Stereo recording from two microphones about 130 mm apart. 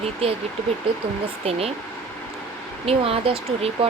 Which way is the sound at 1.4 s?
50° right (ahead or behind).